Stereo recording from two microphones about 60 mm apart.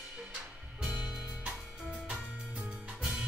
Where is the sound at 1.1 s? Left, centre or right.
Centre.